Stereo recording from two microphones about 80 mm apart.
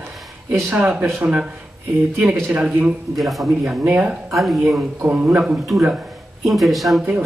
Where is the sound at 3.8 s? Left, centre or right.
Centre.